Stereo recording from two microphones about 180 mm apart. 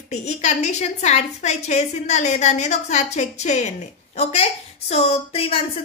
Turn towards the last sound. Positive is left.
turn(degrees=30)  # may be behind; listen again after turning